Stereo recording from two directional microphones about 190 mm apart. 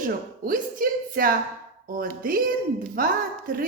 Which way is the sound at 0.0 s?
45° right (ahead or behind).